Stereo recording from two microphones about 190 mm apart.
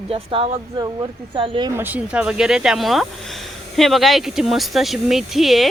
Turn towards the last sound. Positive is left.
turn(degrees=0)  # may be behind; listen again after turning